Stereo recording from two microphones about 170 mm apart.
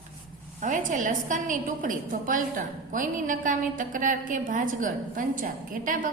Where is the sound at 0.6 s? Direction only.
50° right (ahead or behind).